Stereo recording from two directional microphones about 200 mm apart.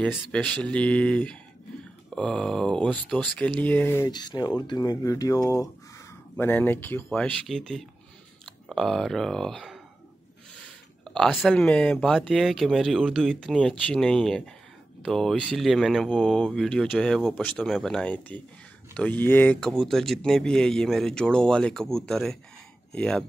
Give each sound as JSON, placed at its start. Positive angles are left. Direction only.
{"t": 0.0, "sound": "speech", "side_deg": 5}
{"t": 11.1, "sound": "speech", "side_deg": 0}